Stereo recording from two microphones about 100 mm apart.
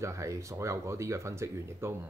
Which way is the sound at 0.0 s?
30° right (ahead or behind).